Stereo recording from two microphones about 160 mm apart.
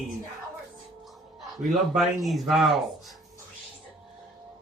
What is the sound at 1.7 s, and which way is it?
Speech, centre (ahead or behind).